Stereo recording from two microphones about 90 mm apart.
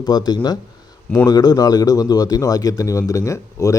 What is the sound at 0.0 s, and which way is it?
A man's voice, 50° left (ahead or behind).